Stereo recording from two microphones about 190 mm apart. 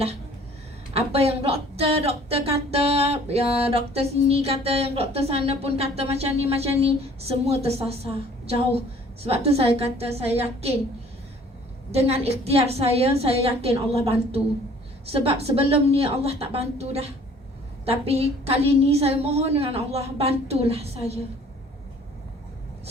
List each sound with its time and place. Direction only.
0.9 s speech: 30° right (ahead or behind)
11.9 s speech: 35° right (ahead or behind)